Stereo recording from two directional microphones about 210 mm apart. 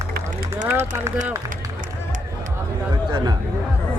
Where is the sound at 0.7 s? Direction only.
10° right (ahead or behind).